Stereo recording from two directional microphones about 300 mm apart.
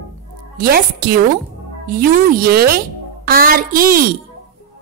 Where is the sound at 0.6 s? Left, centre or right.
Right.